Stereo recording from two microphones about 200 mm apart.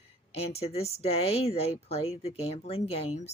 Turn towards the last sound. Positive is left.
turn(degrees=30)  # may be behind; listen again after turning